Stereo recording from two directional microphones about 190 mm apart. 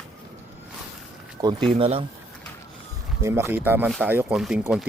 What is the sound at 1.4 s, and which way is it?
Speech, 25° right (ahead or behind).